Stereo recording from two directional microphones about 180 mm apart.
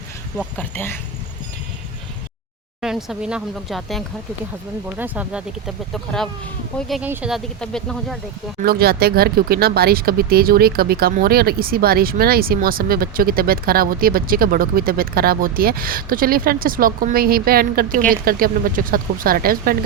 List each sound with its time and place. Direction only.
0.3 s speech: 10° left (ahead or behind)
2.8 s speech: 5° right (ahead or behind)
8.6 s a woman's voice: 60° right (ahead or behind)